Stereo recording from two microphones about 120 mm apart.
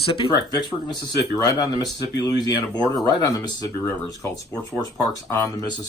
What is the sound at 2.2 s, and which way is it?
Speech, 35° left (ahead or behind).